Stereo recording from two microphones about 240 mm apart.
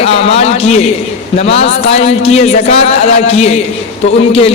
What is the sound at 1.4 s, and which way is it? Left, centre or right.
A man's voice, left.